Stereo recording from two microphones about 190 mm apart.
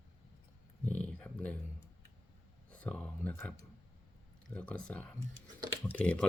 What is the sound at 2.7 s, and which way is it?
Speech, 5° left (ahead or behind).